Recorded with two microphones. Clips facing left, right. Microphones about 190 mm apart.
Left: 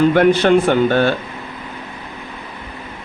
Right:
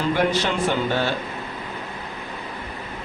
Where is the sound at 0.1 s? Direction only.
55° left (ahead or behind).